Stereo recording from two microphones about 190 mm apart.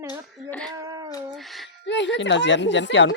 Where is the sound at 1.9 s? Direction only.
70° left (ahead or behind).